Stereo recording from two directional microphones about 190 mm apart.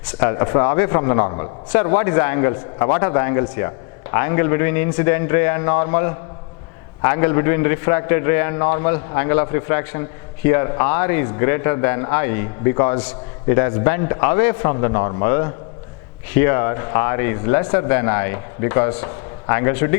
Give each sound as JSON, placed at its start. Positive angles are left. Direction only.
{"t": 0.2, "sound": "a man's voice", "side_deg": 20}